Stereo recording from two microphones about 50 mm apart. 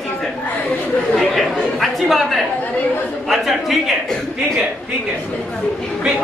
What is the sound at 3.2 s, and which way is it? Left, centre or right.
Speech, centre.